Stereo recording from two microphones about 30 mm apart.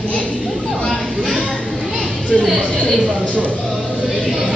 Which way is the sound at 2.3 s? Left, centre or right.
Centre.